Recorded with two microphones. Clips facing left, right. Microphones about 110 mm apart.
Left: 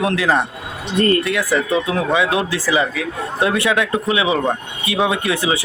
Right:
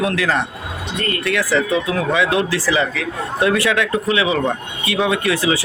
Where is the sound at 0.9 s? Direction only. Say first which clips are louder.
Left 9 dB; 35° left (ahead or behind).